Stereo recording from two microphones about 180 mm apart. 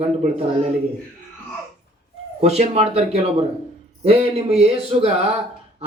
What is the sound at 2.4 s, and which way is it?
Speech, 35° right (ahead or behind).